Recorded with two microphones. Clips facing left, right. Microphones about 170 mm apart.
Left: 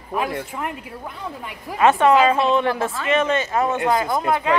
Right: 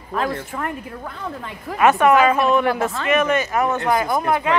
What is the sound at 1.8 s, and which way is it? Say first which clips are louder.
A woman's voice: even; 25° left (ahead or behind).